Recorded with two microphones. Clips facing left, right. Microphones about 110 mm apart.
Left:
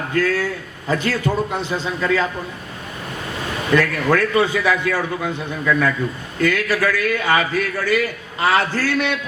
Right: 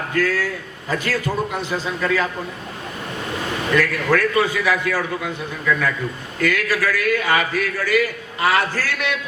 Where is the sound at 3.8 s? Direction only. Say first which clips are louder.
Even; 25° left (ahead or behind).